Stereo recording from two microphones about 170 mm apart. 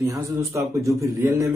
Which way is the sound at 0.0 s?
15° right (ahead or behind).